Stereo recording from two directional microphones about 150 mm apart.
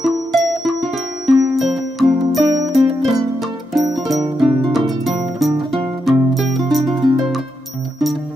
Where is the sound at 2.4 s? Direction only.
25° right (ahead or behind).